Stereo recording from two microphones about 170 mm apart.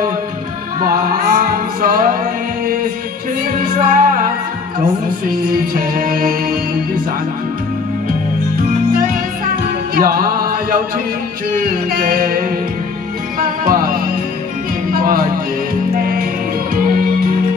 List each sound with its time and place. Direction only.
0.8 s music: 55° right (ahead or behind)
3.5 s music: 50° right (ahead or behind)
5.3 s music: 55° right (ahead or behind)
8.6 s music: 55° right (ahead or behind)
9.9 s mantra: 60° right (ahead or behind)
11.5 s music: 55° right (ahead or behind)
16.7 s music: 55° right (ahead or behind)